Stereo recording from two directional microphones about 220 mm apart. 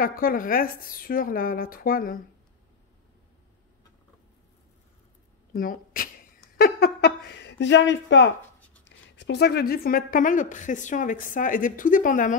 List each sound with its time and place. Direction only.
0.0 s speech: 40° left (ahead or behind)
5.5 s speech: 40° left (ahead or behind)